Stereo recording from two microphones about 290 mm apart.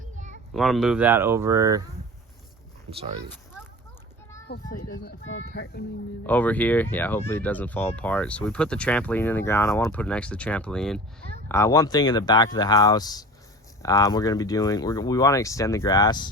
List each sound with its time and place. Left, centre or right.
0.0 s children playing: right
0.5 s speech: centre
2.9 s speech: centre
5.0 s speech: left
6.2 s speech: centre